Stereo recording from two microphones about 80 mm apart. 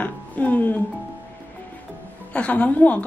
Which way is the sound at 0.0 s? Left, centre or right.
Centre.